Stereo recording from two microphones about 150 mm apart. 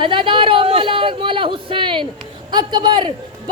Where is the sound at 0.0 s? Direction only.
35° right (ahead or behind).